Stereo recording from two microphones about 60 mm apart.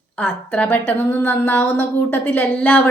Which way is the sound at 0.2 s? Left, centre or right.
Left.